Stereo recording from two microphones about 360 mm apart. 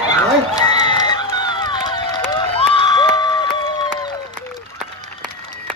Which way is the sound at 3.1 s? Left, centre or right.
Centre.